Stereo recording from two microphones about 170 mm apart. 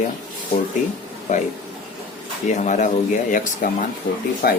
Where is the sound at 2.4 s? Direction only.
45° left (ahead or behind); by 4.6 s 60° left (ahead or behind).